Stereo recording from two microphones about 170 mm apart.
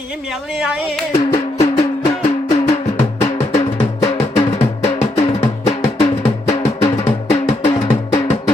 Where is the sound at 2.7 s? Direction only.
40° left (ahead or behind).